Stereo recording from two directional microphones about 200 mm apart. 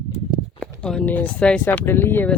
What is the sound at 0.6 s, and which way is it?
Speech, 5° left (ahead or behind).